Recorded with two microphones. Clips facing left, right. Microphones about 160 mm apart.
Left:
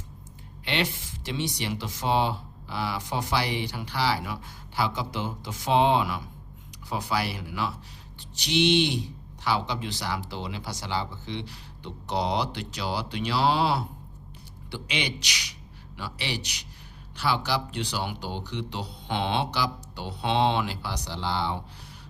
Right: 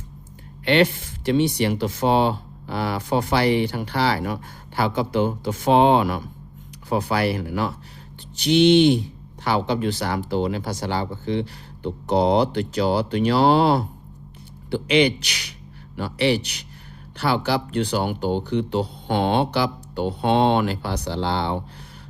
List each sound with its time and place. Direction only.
0.6 s speech: 55° right (ahead or behind)